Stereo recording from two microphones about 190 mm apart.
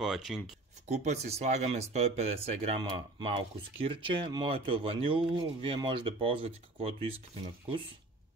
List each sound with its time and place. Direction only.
0.0 s speech: centre (ahead or behind)
0.8 s speech: 35° right (ahead or behind)